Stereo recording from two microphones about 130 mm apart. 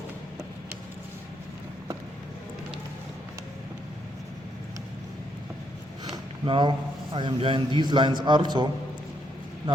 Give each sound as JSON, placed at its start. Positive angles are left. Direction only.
{"t": 6.4, "sound": "a man's voice", "side_deg": -40}